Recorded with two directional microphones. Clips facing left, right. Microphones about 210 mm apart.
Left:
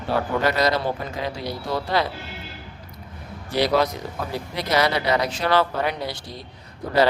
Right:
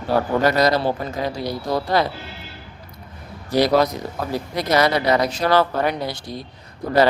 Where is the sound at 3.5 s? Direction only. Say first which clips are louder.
Right 4 dB; 40° right (ahead or behind).